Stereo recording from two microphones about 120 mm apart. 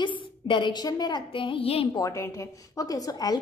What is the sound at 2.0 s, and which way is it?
Speech, 25° left (ahead or behind).